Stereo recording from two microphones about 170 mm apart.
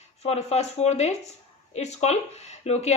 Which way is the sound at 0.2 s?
40° left (ahead or behind).